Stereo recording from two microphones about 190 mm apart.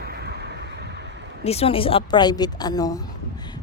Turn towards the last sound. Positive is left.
turn(degrees=20)  # may be behind; listen again after turning